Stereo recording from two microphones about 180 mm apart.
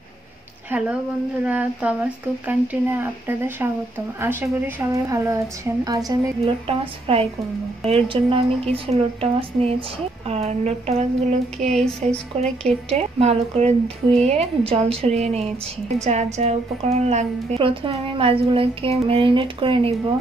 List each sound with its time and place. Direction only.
0.7 s a woman's voice: 10° right (ahead or behind)
7.1 s a woman's voice: 30° right (ahead or behind)
11.6 s speech: 5° left (ahead or behind)
12.4 s a woman's voice: 35° right (ahead or behind)